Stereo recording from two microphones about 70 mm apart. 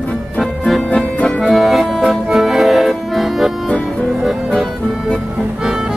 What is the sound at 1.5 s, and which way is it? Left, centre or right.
Accordion, centre.